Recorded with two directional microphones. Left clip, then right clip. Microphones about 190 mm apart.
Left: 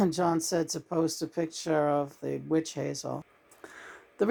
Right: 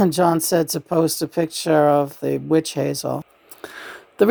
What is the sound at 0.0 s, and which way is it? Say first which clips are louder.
Speech: right 10 dB; 40° right (ahead or behind).